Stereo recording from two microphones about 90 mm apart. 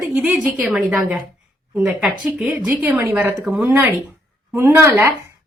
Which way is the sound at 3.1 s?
25° right (ahead or behind).